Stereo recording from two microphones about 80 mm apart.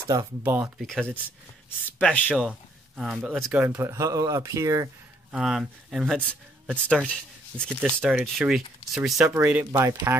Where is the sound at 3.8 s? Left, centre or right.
Right.